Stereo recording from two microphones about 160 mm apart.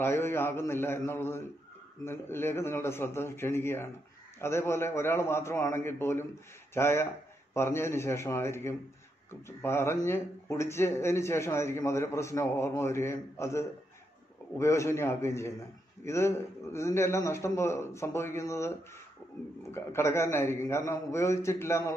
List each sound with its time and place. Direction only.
0.0 s a man's voice: 15° left (ahead or behind)
19.7 s a man's voice: 15° left (ahead or behind)